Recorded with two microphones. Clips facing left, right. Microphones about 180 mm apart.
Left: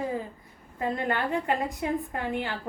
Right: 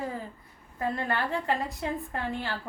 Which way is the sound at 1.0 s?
15° left (ahead or behind).